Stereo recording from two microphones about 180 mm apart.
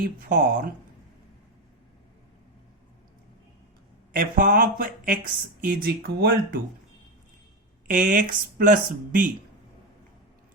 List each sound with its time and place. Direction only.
0.0 s speech: 55° right (ahead or behind)
4.1 s speech: 50° right (ahead or behind)
7.9 s speech: 50° right (ahead or behind)